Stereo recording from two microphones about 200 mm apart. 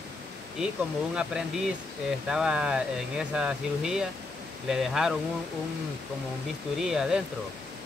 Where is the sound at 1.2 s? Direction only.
5° right (ahead or behind).